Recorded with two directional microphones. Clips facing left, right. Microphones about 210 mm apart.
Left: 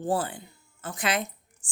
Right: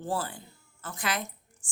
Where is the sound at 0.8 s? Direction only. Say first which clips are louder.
Left 4 dB; 20° left (ahead or behind).